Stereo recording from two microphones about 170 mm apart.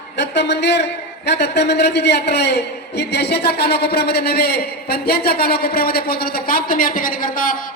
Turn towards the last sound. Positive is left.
turn(degrees=55)  # may be behind; listen again after turning